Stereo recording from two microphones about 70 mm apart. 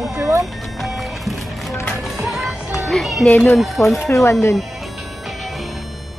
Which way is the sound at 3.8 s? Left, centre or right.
Left.